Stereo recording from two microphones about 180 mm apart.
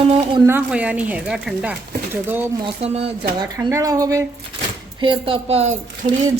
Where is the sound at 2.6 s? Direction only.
35° right (ahead or behind).